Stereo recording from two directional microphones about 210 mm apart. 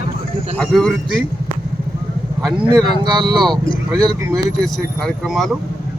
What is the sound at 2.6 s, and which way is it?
Speech, 20° right (ahead or behind).